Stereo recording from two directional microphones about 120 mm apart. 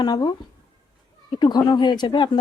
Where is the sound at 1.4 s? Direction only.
35° left (ahead or behind).